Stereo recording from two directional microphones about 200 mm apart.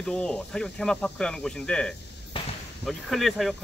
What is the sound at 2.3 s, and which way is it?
Basketball bounce, 25° left (ahead or behind).